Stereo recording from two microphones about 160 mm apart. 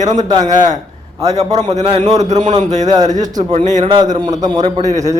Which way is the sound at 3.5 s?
45° right (ahead or behind).